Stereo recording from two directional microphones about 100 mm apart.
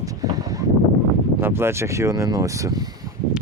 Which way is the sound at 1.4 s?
25° right (ahead or behind).